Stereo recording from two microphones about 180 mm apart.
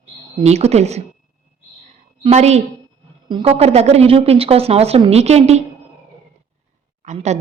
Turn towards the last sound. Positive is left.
turn(degrees=-40)  # may be behind; listen again after turning